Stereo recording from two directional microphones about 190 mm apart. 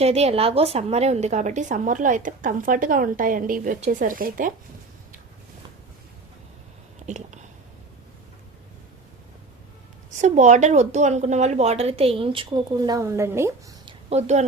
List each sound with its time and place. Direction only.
0.0 s a woman's voice: 35° right (ahead or behind)
7.0 s speech: 40° right (ahead or behind)
10.1 s a woman's voice: 40° right (ahead or behind); by 13.7 s 15° right (ahead or behind)
13.8 s a sound: 35° right (ahead or behind)